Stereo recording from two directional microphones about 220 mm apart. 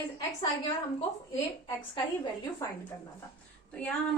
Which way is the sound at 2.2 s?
15° left (ahead or behind).